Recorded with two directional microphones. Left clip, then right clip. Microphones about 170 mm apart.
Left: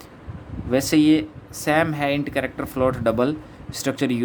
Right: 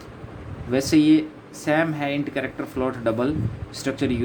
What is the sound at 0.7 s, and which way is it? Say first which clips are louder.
Speech: even; 40° left (ahead or behind).